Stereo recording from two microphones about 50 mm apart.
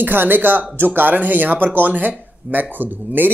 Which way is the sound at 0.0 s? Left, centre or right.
Right.